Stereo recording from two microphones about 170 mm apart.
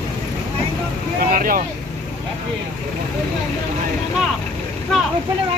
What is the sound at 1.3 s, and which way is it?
Speech, 55° right (ahead or behind).